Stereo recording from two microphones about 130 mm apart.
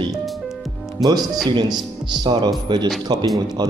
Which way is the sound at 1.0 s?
30° right (ahead or behind).